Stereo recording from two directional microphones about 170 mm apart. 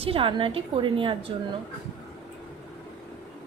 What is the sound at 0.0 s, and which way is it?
A woman's voice, 30° right (ahead or behind).